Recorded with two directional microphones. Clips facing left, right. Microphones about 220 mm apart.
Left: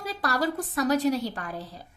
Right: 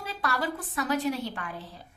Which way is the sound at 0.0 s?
40° left (ahead or behind).